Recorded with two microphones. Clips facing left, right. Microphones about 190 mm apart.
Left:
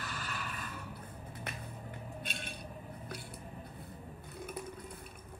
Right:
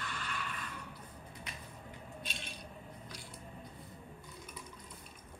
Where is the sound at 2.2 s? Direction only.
55° left (ahead or behind).